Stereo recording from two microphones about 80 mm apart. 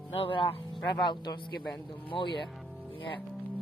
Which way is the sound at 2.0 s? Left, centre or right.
Left.